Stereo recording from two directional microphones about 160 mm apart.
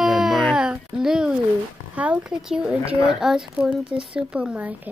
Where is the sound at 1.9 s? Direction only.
10° right (ahead or behind).